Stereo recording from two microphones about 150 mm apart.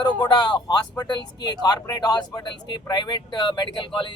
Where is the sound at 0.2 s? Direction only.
30° left (ahead or behind).